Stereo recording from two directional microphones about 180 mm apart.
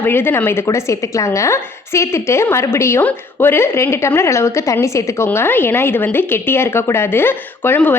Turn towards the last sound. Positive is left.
turn(degrees=10)  # may be behind; listen again after turning